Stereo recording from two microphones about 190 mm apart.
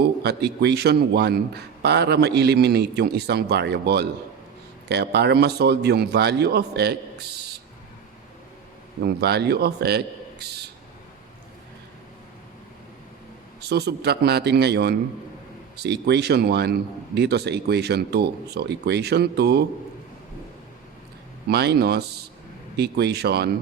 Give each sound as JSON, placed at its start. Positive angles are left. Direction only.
{"t": 0.0, "sound": "a man's voice", "side_deg": -60}
{"t": 9.0, "sound": "a man's voice", "side_deg": -55}
{"t": 13.6, "sound": "a man's voice", "side_deg": -60}
{"t": 21.4, "sound": "a man's voice", "side_deg": -60}